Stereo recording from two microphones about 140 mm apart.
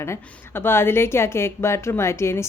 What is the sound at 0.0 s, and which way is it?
Speech, 15° left (ahead or behind).